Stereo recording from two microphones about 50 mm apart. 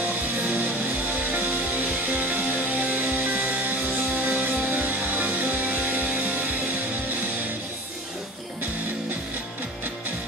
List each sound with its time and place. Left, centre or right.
1.3 s music: right